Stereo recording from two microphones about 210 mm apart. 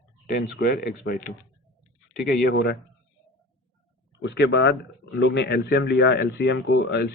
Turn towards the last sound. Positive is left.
turn(degrees=55)  # may be behind; listen again after turning